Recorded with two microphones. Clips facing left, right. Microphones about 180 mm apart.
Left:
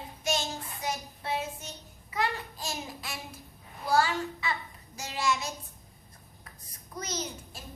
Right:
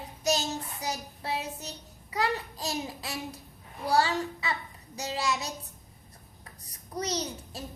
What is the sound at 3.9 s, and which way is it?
Child singing, 35° right (ahead or behind).